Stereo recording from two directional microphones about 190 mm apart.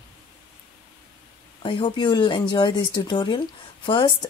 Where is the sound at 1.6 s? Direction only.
25° left (ahead or behind).